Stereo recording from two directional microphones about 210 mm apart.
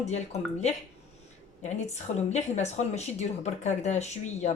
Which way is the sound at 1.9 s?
35° left (ahead or behind).